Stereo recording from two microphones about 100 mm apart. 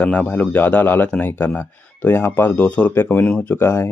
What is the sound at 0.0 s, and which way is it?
Speech, 15° left (ahead or behind).